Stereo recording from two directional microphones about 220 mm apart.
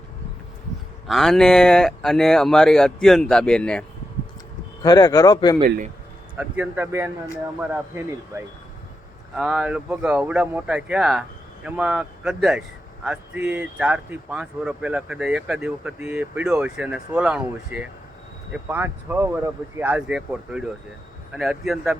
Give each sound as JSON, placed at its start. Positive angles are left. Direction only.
{"t": 1.0, "sound": "speech", "side_deg": 0}
{"t": 4.8, "sound": "speech", "side_deg": 15}
{"t": 6.3, "sound": "speech", "side_deg": -5}
{"t": 8.3, "sound": "speech", "side_deg": -10}